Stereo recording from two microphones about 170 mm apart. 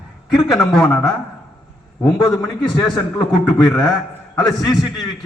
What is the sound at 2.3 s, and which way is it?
A man's voice, 25° left (ahead or behind).